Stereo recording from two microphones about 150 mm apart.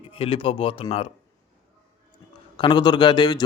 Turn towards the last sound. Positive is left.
turn(degrees=30)  # may be behind; listen again after turning